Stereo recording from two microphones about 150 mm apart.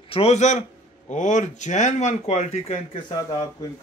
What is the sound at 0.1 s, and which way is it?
A man's voice, 45° left (ahead or behind).